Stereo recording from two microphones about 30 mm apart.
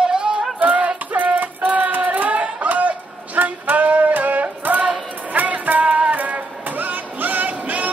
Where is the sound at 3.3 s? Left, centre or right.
Right.